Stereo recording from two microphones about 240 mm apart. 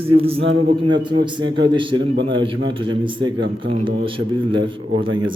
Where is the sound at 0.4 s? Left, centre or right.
Right.